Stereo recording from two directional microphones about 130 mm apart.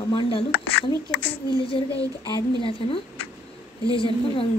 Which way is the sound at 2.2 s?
40° left (ahead or behind).